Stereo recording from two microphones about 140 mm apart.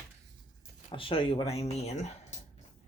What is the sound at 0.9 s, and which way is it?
Speech, 40° left (ahead or behind).